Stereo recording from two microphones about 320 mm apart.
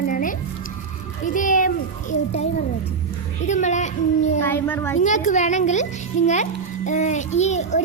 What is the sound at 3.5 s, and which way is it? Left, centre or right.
Speech, left.